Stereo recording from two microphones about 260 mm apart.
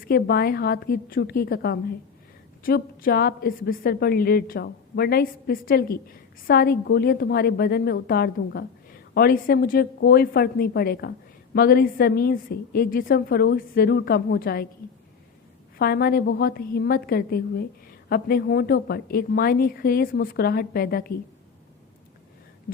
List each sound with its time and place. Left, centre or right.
0.0 s a woman's voice: left
15.8 s a woman's voice: left